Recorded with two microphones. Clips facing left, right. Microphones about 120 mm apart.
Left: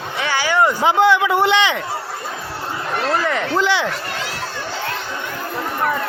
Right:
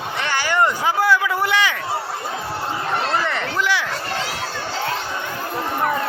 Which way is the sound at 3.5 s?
30° left (ahead or behind).